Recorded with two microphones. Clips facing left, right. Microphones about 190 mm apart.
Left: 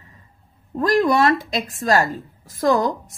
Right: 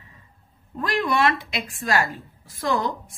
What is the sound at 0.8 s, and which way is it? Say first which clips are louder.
A woman's voice: left 6 dB; 40° left (ahead or behind).